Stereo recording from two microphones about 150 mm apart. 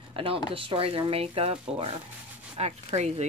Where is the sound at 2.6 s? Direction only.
45° right (ahead or behind).